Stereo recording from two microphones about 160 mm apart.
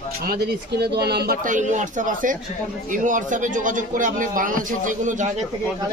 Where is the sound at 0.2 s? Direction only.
75° right (ahead or behind); by 5.3 s 50° right (ahead or behind).